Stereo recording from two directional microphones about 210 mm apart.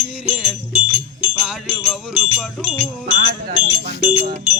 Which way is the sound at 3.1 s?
30° right (ahead or behind).